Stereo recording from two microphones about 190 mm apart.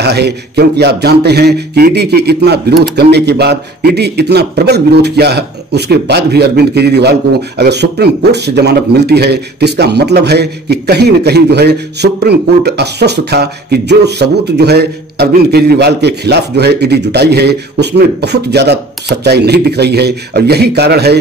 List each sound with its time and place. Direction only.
0.0 s a man's voice: 60° right (ahead or behind)